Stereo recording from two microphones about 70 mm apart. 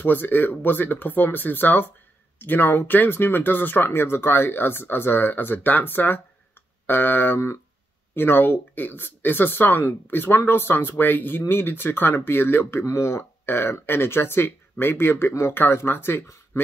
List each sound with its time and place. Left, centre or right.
0.0 s speech: left